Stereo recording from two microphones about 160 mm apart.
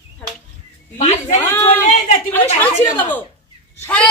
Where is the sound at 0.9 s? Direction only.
45° left (ahead or behind).